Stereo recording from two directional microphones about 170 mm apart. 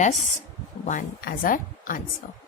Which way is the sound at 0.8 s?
45° left (ahead or behind).